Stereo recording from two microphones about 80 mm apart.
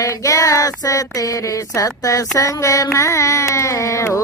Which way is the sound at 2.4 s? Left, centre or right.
Left.